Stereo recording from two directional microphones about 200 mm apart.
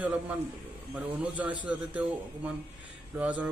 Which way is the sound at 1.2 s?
5° right (ahead or behind).